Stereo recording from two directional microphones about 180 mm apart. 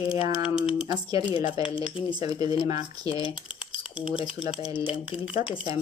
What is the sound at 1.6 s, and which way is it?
Speech, 30° left (ahead or behind).